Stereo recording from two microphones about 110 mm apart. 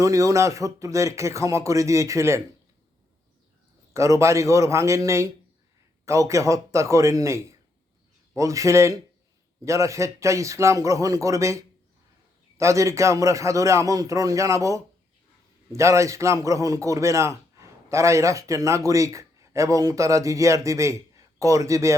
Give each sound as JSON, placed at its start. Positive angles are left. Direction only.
{"t": 0.0, "sound": "a man's voice", "side_deg": -30}
{"t": 3.9, "sound": "a man's voice", "side_deg": -25}